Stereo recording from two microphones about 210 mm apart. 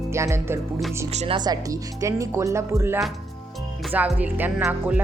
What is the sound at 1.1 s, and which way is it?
Speech, 30° right (ahead or behind).